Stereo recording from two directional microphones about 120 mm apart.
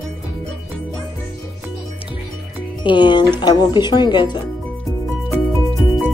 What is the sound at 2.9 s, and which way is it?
Speech, 40° left (ahead or behind).